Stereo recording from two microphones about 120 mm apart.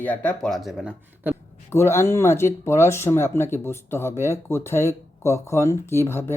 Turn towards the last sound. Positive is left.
turn(degrees=20)  # may be behind; listen again after turning